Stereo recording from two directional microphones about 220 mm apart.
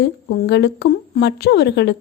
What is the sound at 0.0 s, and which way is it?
A woman's voice, 50° left (ahead or behind).